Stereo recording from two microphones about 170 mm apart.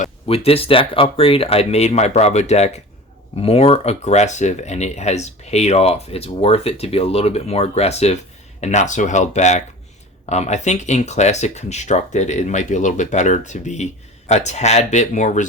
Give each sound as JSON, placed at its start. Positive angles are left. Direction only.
{"t": 0.0, "sound": "speech", "side_deg": 35}